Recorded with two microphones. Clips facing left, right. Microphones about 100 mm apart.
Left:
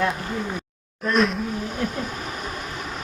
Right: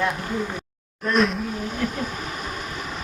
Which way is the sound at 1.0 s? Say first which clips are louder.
Even; centre (ahead or behind).